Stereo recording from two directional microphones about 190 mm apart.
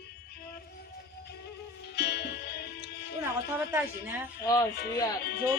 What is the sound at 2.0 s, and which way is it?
Music, 60° left (ahead or behind).